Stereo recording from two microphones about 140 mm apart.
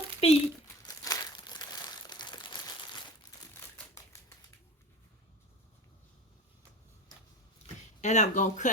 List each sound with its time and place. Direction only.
0.2 s speech: 45° left (ahead or behind)
0.9 s crumpling: 25° left (ahead or behind)
3.5 s typewriter: 20° left (ahead or behind)
8.0 s speech: 55° left (ahead or behind)